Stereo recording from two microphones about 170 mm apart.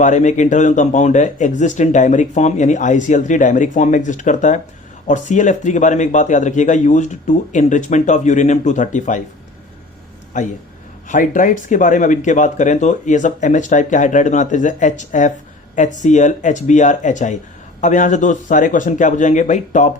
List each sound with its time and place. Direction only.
0.0 s speech: 45° left (ahead or behind)
10.3 s speech: 45° left (ahead or behind)